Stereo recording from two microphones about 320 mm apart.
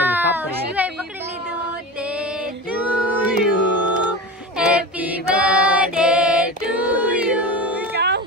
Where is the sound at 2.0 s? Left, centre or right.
Centre.